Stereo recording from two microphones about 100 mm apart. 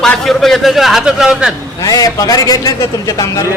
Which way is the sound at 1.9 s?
35° left (ahead or behind).